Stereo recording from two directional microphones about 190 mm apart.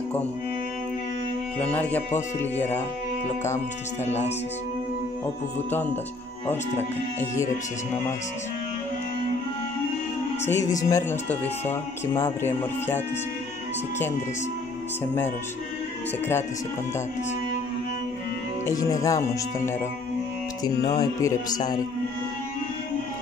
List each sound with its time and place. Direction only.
1.6 s speech: 10° left (ahead or behind)
6.4 s speech: 10° left (ahead or behind)
10.5 s speech: 20° left (ahead or behind)
18.7 s speech: 15° left (ahead or behind)
21.0 s speech: 15° left (ahead or behind)